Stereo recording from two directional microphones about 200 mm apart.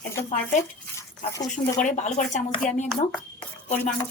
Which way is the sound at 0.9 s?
15° left (ahead or behind).